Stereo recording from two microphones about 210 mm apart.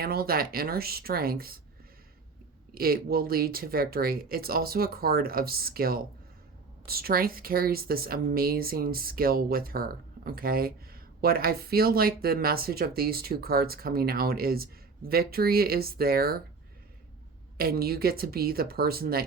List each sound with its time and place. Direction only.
0.0 s speech: 45° right (ahead or behind)
2.7 s speech: 45° right (ahead or behind)
17.6 s speech: 45° right (ahead or behind)